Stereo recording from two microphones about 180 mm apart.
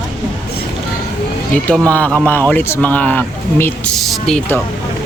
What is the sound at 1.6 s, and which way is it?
Speech, 5° left (ahead or behind).